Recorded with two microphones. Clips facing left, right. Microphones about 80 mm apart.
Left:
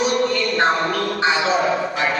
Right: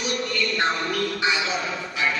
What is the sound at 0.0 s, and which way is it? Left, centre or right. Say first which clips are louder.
Music: left 8 dB; left.